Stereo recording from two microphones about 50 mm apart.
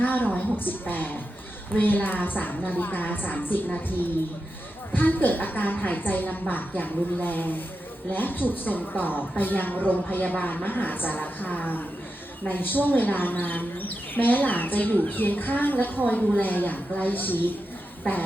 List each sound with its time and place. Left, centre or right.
0.0 s a sound: left
0.6 s speech: left
4.9 s speech: left